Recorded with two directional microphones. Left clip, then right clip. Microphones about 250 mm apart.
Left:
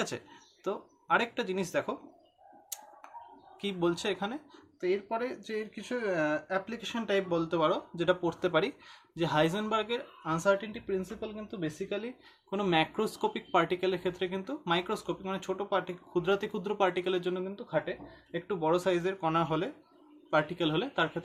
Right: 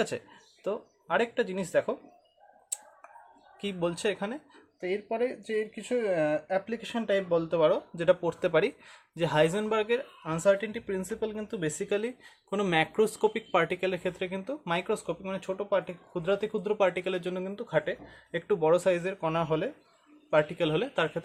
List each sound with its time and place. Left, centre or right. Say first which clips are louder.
0.1 s speech: right 4 dB; centre
3.6 s speech: right 1 dB; centre